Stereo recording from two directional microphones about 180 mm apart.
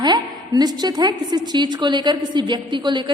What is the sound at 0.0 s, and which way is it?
A woman's voice, 20° right (ahead or behind).